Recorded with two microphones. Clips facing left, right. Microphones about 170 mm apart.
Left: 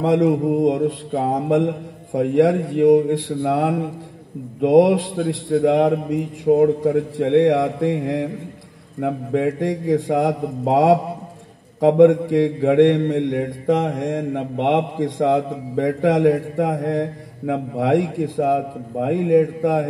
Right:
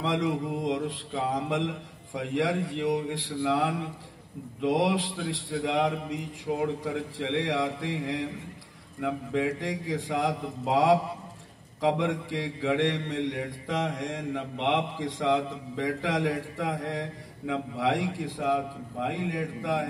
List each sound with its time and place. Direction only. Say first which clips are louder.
0.0 s mantra: left 11 dB; 50° left (ahead or behind)